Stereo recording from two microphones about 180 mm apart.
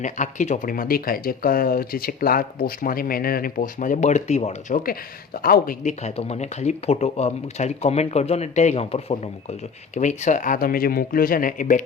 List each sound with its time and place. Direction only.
0.0 s speech: 45° left (ahead or behind)